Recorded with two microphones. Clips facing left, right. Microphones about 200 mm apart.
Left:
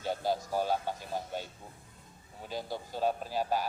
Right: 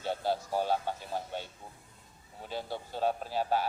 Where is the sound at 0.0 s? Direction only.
10° left (ahead or behind).